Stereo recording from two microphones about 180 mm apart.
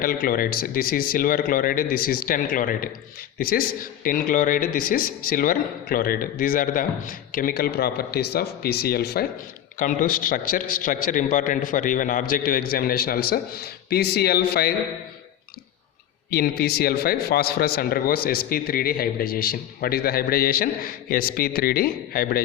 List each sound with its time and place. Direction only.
0.0 s speech: 55° left (ahead or behind)
9.7 s speech: 50° left (ahead or behind)
16.3 s a man's voice: 60° left (ahead or behind)